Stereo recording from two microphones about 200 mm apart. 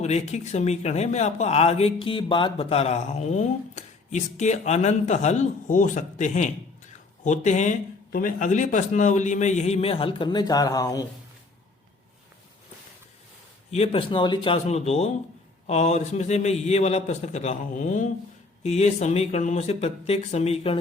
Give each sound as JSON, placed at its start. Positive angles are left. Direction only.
{"t": 0.0, "sound": "speech", "side_deg": 35}
{"t": 13.7, "sound": "speech", "side_deg": 35}